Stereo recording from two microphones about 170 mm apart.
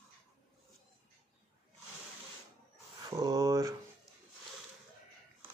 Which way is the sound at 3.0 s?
20° right (ahead or behind).